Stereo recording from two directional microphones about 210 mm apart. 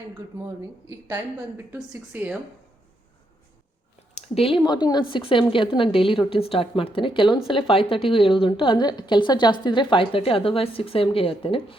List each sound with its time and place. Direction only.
0.3 s a woman's voice: 15° right (ahead or behind)
4.1 s a woman's voice: 25° left (ahead or behind)